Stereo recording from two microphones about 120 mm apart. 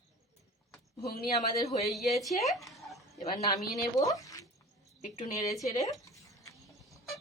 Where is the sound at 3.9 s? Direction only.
30° left (ahead or behind).